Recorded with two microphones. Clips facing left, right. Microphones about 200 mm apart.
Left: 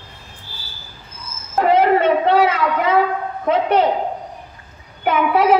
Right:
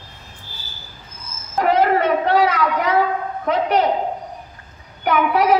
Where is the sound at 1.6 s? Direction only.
25° left (ahead or behind).